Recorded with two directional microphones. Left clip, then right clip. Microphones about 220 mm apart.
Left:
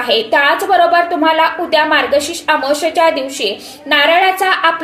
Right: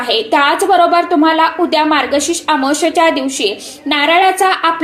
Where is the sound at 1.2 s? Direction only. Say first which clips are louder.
Right 1 dB; 25° right (ahead or behind).